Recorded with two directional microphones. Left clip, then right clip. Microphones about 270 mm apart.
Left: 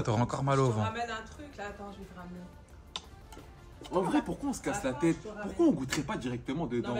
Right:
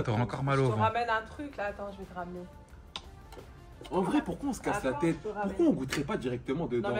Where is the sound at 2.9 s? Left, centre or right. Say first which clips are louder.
Left 1 dB; centre.